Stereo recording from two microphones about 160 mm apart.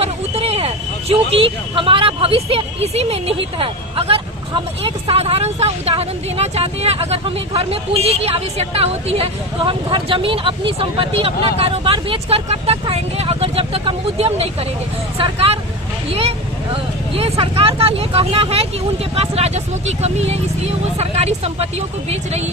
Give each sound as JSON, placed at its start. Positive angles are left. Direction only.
{"t": 0.0, "sound": "speech", "side_deg": -40}